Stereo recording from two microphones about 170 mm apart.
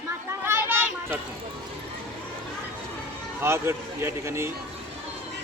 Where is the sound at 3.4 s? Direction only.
15° right (ahead or behind).